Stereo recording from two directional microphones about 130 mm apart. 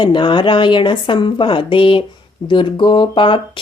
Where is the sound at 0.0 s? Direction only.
40° left (ahead or behind).